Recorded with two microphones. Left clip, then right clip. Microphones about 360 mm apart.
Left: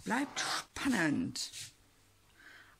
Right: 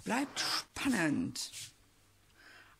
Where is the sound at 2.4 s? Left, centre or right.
Centre.